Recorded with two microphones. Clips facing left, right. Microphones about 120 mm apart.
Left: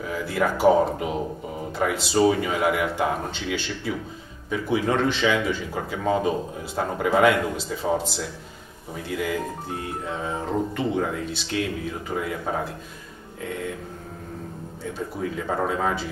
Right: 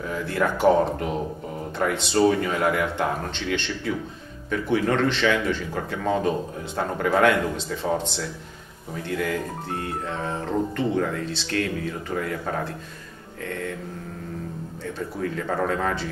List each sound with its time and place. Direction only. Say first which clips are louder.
0.1 s a man's voice: even; 5° left (ahead or behind)
15.3 s a man's voice: even; 15° left (ahead or behind)